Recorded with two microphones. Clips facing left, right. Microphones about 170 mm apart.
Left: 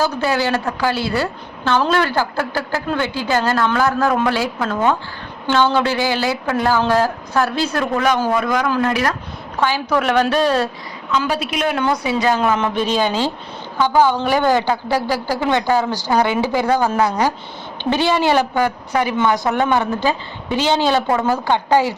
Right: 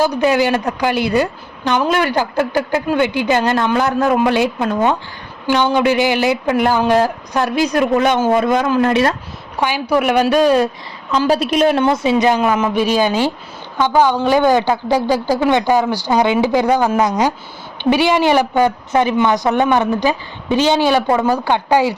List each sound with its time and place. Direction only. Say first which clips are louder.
0.0 s a woman's voice: right 4 dB; 15° right (ahead or behind)
9.6 s a woman's voice: right 2 dB; 15° right (ahead or behind)
11.1 s a woman's voice: right 5 dB; 35° right (ahead or behind); by 12.4 s 20° right (ahead or behind)
12.4 s a woman's voice: right 2 dB; 5° right (ahead or behind)